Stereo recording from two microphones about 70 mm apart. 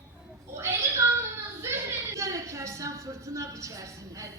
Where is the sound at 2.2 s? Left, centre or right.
Right.